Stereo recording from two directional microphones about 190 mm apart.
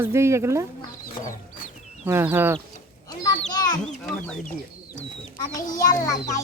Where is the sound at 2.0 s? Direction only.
10° right (ahead or behind).